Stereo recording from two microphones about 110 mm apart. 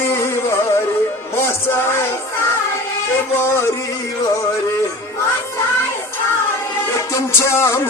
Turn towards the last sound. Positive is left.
turn(degrees=25)  # may be behind; listen again after turning